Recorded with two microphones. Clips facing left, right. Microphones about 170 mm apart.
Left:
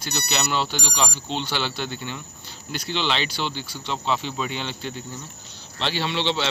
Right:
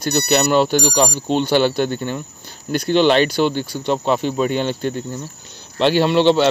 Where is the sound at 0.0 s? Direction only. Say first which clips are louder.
Right 11 dB; 50° right (ahead or behind).